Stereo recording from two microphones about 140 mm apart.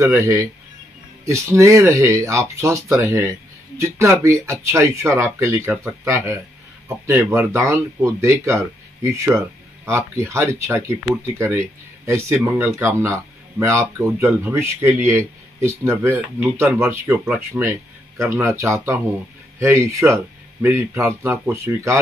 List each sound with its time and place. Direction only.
0.0 s speech: 20° right (ahead or behind)
17.6 s a sound: 20° right (ahead or behind)
18.6 s speech: 20° right (ahead or behind)